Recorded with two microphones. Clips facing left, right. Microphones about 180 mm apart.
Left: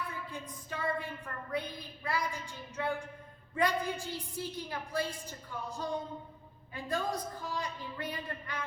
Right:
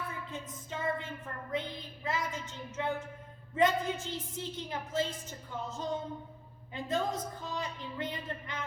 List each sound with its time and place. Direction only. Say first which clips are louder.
0.3 s a woman's voice: right 1 dB; 20° right (ahead or behind)